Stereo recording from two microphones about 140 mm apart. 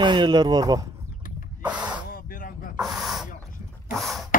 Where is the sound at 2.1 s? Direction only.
90° left.